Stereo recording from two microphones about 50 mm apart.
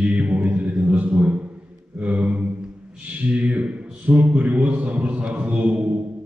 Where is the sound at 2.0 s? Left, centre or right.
Right.